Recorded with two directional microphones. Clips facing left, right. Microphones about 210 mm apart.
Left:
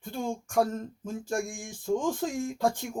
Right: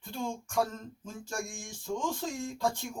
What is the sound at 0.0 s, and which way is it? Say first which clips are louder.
Speech: left 3 dB; 50° left (ahead or behind).